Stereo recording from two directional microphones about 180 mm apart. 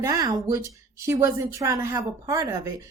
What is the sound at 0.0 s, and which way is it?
Speech, 20° right (ahead or behind).